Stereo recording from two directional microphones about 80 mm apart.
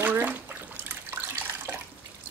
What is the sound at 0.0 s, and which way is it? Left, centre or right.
Bathtub, right.